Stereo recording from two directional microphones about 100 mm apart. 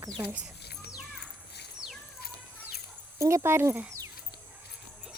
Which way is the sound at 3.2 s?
30° right (ahead or behind).